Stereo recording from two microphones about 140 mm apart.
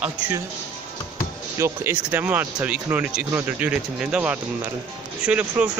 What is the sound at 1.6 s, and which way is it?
Speech, 20° right (ahead or behind).